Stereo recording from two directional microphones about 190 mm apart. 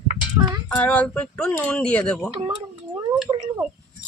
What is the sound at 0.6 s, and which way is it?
Speech, 5° left (ahead or behind).